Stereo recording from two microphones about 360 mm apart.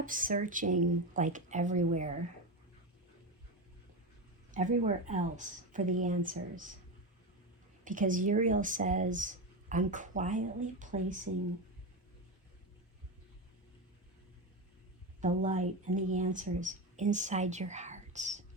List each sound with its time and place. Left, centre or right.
0.0 s speech: right
4.5 s speech: right
7.9 s speech: right
15.2 s speech: centre